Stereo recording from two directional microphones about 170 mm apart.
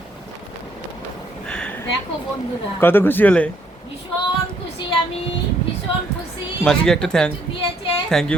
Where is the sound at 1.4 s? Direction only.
5° left (ahead or behind).